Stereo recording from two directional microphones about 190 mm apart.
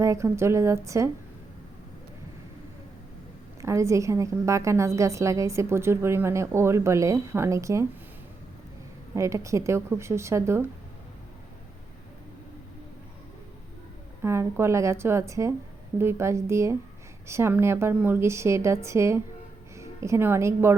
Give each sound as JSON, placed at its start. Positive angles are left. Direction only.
{"t": 0.0, "sound": "a woman's voice", "side_deg": -15}
{"t": 3.6, "sound": "a woman's voice", "side_deg": -15}
{"t": 9.1, "sound": "a woman's voice", "side_deg": -15}
{"t": 14.2, "sound": "a woman's voice", "side_deg": -15}